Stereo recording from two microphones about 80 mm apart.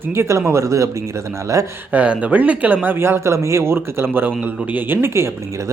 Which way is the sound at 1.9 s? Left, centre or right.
Centre.